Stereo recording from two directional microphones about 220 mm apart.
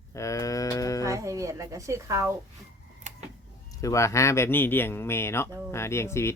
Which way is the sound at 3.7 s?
15° left (ahead or behind).